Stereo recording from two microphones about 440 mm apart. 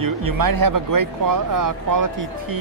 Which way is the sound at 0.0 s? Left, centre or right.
Right.